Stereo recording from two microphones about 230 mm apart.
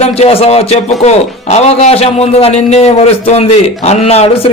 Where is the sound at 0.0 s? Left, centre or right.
Left.